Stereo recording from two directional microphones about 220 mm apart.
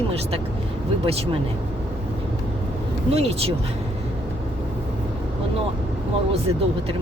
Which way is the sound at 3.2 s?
30° right (ahead or behind).